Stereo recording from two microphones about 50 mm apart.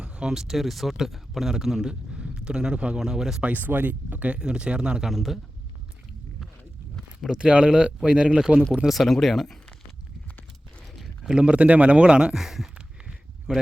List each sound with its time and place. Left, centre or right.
0.0 s speech: centre
3.4 s speech: right
4.4 s speech: centre
5.1 s speech: centre
7.3 s speech: centre
8.9 s speech: centre
11.3 s speech: right
12.4 s speech: centre
13.5 s speech: centre